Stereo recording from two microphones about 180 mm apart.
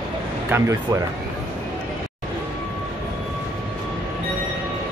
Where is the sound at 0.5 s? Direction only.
15° right (ahead or behind).